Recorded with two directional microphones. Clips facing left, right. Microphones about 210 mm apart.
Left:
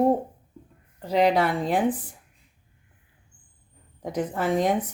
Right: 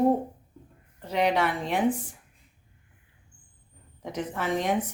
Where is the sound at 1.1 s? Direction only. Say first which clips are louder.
Left 4 dB; 35° left (ahead or behind).